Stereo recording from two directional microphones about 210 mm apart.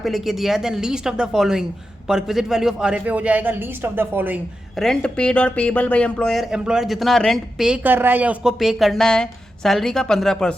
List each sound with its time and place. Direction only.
0.0 s speech: centre (ahead or behind)
4.8 s speech: 5° left (ahead or behind)